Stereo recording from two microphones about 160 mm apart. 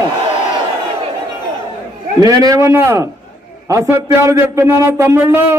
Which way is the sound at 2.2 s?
20° right (ahead or behind).